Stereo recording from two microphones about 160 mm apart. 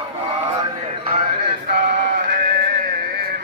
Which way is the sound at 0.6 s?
40° right (ahead or behind).